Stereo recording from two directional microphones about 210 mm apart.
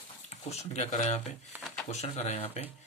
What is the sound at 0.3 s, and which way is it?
Speech, 30° left (ahead or behind).